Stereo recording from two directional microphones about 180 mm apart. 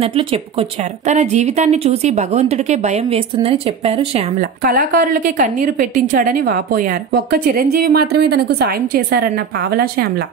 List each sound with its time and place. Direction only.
0.0 s speech: 30° right (ahead or behind)
4.4 s a woman's voice: 50° right (ahead or behind)